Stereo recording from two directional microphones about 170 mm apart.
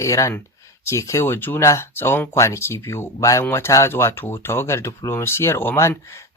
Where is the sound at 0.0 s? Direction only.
20° left (ahead or behind).